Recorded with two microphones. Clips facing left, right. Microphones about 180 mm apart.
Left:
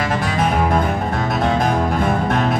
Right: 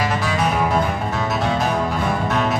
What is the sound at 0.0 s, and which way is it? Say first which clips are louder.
Music: left 1 dB; 50° left (ahead or behind).